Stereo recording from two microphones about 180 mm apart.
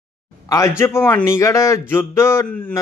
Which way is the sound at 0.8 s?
15° left (ahead or behind).